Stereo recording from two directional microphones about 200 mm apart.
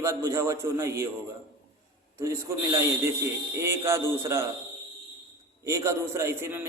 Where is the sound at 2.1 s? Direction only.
15° right (ahead or behind).